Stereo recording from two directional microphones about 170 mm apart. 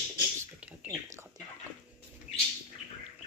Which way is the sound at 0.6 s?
10° right (ahead or behind).